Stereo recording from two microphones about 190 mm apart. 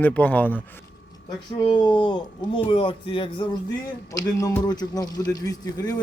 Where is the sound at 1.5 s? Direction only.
25° left (ahead or behind).